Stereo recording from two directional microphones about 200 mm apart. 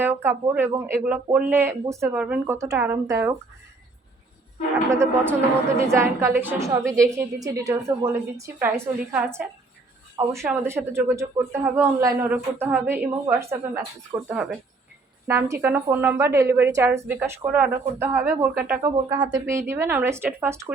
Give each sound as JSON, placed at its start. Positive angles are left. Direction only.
{"t": 0.0, "sound": "speech", "side_deg": -10}
{"t": 4.9, "sound": "speech", "side_deg": -15}
{"t": 14.1, "sound": "speech", "side_deg": -25}
{"t": 15.3, "sound": "speech", "side_deg": -15}